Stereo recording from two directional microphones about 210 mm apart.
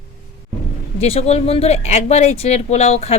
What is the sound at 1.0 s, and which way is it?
Speech, 30° left (ahead or behind).